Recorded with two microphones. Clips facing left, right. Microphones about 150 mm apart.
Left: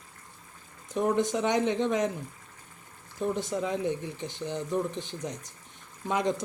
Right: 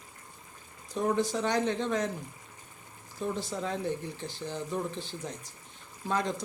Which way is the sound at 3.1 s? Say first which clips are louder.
Left 4 dB; 15° left (ahead or behind).